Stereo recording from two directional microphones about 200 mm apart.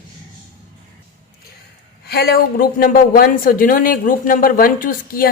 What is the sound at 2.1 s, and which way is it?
A woman's voice, 50° left (ahead or behind).